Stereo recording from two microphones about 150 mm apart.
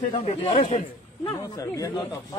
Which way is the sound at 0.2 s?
40° left (ahead or behind).